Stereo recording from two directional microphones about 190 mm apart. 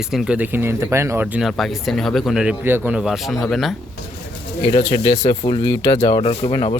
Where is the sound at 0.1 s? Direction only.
5° right (ahead or behind).